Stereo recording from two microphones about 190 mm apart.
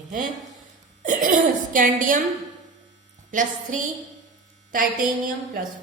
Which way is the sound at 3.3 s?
45° right (ahead or behind).